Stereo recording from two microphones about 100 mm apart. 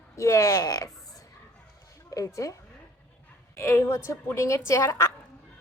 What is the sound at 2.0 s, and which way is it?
A woman's voice, 35° left (ahead or behind).